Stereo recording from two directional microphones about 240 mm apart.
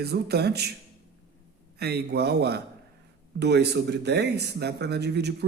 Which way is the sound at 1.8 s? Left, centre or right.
Right.